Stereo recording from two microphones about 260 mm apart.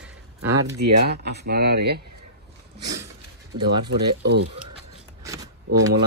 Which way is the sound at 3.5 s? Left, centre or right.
Right.